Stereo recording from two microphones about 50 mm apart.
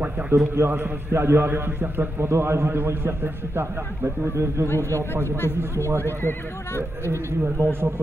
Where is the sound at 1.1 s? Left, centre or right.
Right.